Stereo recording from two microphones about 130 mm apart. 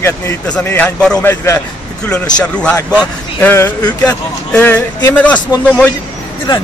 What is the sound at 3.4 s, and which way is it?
A man's voice, 15° left (ahead or behind).